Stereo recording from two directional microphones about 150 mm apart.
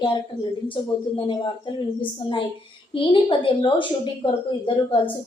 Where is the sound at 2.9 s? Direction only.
35° left (ahead or behind).